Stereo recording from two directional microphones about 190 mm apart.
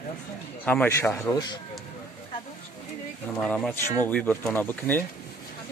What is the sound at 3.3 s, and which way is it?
Speech, 5° left (ahead or behind).